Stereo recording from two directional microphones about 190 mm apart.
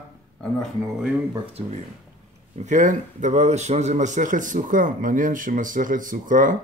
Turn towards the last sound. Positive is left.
turn(degrees=-45)  # may be behind; listen again after turning